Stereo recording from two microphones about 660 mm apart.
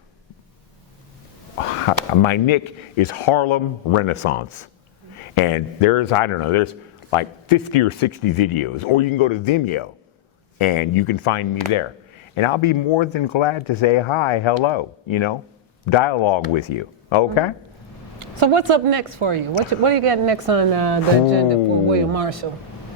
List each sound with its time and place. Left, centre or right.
1.9 s speech: left
18.2 s a woman's voice: right